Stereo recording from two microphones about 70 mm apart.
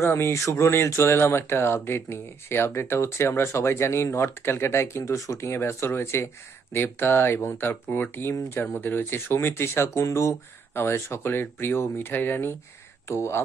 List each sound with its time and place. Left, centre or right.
0.0 s speech: left
5.5 s speech: left
13.1 s speech: left